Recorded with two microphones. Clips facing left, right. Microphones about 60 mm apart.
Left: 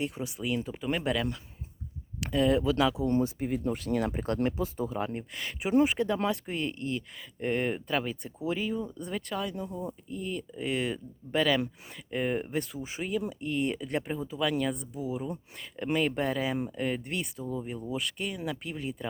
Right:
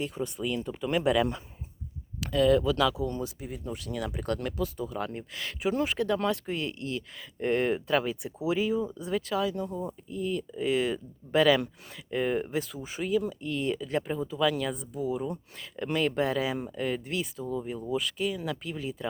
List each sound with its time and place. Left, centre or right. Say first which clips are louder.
0.0 s speech: right 1 dB; centre
2.2 s speech: right 2 dB; centre
3.1 s speech: left 7 dB; left
4.3 s speech: left 1 dB; left
5.3 s speech: even; centre
5.6 s speech: left 4 dB; left
6.2 s speech: right 1 dB; centre